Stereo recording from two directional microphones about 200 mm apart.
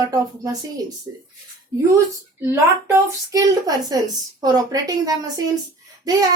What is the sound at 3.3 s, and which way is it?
A woman's voice, 20° right (ahead or behind).